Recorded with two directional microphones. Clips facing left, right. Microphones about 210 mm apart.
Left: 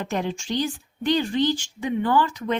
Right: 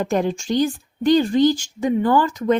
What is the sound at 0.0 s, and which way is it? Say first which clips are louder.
A woman's voice: right 6 dB; 45° right (ahead or behind).